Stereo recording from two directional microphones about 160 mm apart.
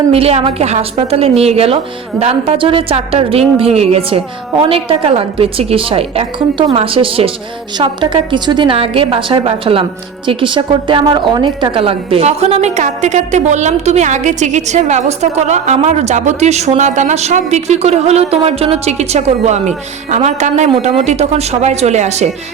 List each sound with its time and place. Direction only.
0.1 s a woman's voice: 40° right (ahead or behind)